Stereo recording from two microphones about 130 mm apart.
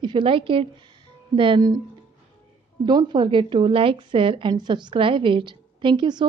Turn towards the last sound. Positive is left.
turn(degrees=-35)  # may be behind; listen again after turning